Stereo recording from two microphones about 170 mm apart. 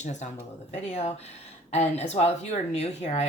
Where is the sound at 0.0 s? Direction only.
45° left (ahead or behind).